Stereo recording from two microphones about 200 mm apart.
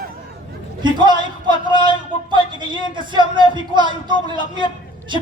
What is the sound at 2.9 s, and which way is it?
A man's voice, 25° right (ahead or behind).